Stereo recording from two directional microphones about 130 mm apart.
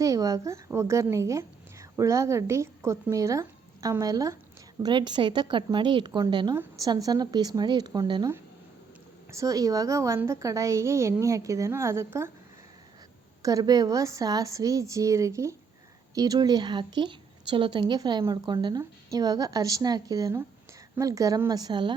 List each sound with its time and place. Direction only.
0.0 s a woman's voice: 25° right (ahead or behind)
6.5 s a woman's voice: 20° right (ahead or behind)
9.3 s a woman's voice: 25° right (ahead or behind)
13.4 s a woman's voice: 30° right (ahead or behind)